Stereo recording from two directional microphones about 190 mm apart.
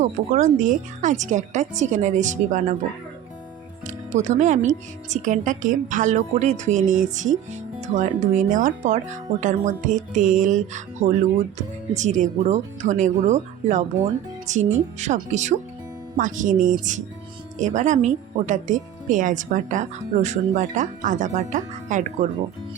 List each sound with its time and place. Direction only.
0.0 s speech: 40° right (ahead or behind)
3.8 s speech: 40° right (ahead or behind)